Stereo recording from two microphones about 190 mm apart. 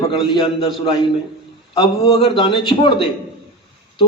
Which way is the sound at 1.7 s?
30° left (ahead or behind).